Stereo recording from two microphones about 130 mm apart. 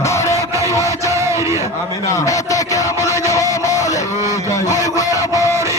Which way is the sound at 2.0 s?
25° left (ahead or behind).